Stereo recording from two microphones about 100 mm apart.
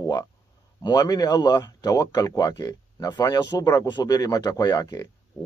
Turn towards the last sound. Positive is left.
turn(degrees=40)  # may be behind; listen again after turning